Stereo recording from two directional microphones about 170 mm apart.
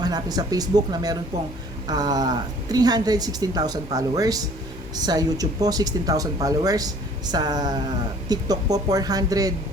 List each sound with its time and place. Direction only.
0.0 s speech: 25° right (ahead or behind)